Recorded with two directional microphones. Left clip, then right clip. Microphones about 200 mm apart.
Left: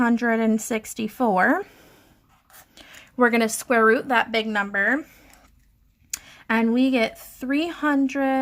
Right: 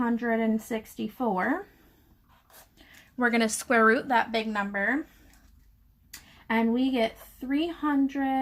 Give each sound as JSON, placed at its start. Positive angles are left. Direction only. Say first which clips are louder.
{"t": 0.0, "sound": "a woman's voice", "louder": "left 6 dB", "side_deg": 45}
{"t": 3.2, "sound": "a woman's voice", "louder": "left 6 dB", "side_deg": 25}
{"t": 6.6, "sound": "a woman's voice", "louder": "left 5 dB", "side_deg": 45}